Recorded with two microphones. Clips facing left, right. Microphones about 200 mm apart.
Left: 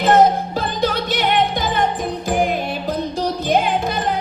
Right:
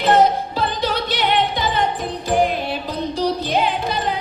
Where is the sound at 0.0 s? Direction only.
45° left (ahead or behind).